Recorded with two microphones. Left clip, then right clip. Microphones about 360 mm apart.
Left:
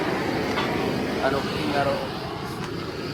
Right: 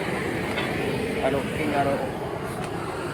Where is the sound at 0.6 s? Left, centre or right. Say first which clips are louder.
Left 1 dB; centre.